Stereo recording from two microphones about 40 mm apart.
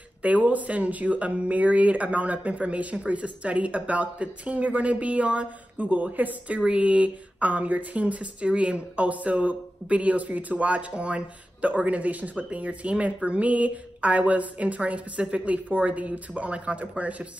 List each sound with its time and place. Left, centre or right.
0.2 s speech: right
6.6 s speech: right